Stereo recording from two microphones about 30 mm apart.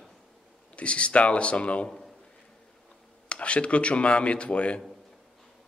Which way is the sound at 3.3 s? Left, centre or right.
Left.